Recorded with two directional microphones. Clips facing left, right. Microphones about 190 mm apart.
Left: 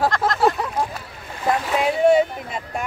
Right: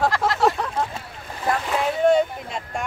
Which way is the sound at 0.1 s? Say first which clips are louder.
Left 1 dB; centre (ahead or behind).